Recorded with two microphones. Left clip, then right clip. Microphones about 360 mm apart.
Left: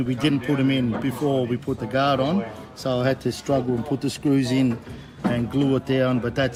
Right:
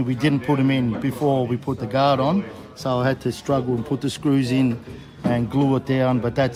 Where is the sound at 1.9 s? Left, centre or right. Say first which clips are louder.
Right 3 dB; centre.